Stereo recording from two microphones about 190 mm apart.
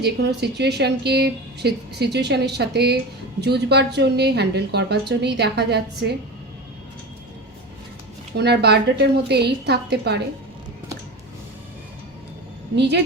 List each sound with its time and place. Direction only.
0.0 s speech: 60° right (ahead or behind)
8.4 s speech: 60° right (ahead or behind)
12.7 s speech: 65° right (ahead or behind)